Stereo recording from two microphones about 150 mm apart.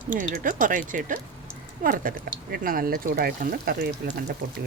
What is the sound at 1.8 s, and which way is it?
Speech, 70° right (ahead or behind).